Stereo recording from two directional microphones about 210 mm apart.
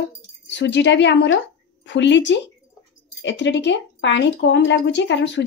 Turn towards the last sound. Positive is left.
turn(degrees=55)  # may be behind; listen again after turning